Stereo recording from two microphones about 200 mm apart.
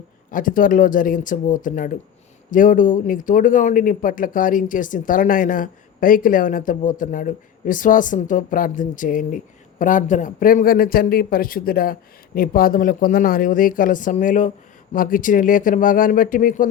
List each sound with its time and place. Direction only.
0.3 s speech: 40° left (ahead or behind)